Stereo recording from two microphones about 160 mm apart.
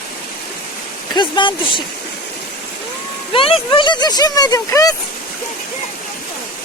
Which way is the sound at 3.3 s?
35° left (ahead or behind).